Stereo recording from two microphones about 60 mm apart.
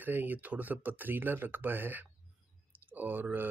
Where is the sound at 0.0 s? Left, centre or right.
Right.